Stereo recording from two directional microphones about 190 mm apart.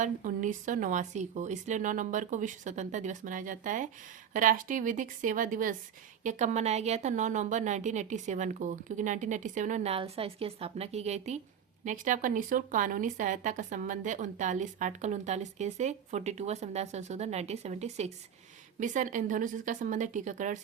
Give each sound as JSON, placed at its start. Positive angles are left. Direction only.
{"t": 0.0, "sound": "a woman's voice", "side_deg": -40}